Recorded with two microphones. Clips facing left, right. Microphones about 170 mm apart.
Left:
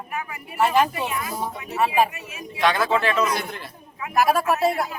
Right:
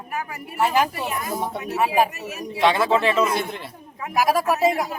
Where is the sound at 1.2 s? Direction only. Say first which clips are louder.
Right 2 dB; 45° right (ahead or behind).